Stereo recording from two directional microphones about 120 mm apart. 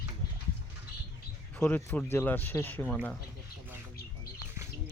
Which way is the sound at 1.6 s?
20° left (ahead or behind).